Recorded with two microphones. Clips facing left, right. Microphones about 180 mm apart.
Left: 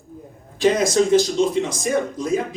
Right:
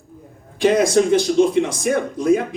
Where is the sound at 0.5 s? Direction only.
60° right (ahead or behind).